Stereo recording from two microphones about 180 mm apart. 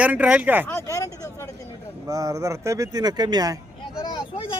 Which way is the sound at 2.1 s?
20° right (ahead or behind).